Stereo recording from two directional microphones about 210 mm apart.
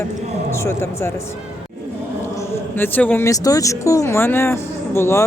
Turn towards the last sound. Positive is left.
turn(degrees=15)  # may be behind; listen again after turning